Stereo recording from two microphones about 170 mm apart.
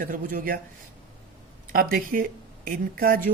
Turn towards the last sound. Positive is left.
turn(degrees=-55)  # may be behind; listen again after turning